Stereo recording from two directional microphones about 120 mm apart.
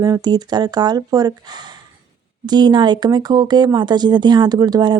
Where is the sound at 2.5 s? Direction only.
35° right (ahead or behind).